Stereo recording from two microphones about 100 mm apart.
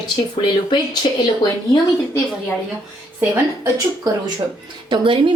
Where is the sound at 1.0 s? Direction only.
55° left (ahead or behind).